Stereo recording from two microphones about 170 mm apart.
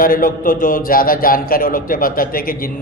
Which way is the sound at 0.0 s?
55° left (ahead or behind).